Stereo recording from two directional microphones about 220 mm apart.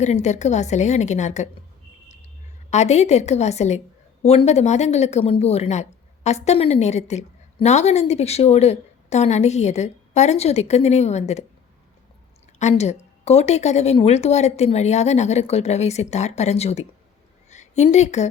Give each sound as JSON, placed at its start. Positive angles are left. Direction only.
{"t": 0.0, "sound": "a woman's voice", "side_deg": 30}
{"t": 2.6, "sound": "a woman's voice", "side_deg": 30}
{"t": 12.5, "sound": "a woman's voice", "side_deg": 30}